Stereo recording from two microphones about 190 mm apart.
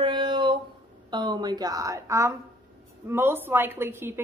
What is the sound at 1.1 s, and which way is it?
A woman's voice, 20° right (ahead or behind).